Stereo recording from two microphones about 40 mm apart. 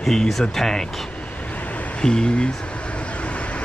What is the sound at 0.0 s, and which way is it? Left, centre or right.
Speech, centre.